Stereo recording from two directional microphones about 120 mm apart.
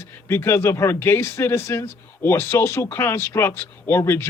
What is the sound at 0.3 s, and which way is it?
Speech, 20° left (ahead or behind).